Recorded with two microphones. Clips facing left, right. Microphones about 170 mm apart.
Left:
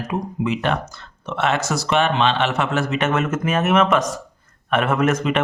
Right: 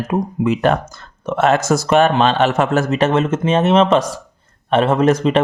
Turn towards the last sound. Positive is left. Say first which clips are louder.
# right 5 dB
turn(degrees=-35)  # may be behind; listen again after turning